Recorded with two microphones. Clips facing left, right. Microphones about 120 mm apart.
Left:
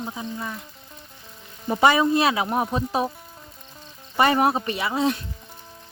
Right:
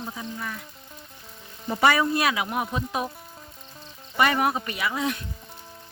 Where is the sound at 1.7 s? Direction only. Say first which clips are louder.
Left 3 dB; 20° left (ahead or behind).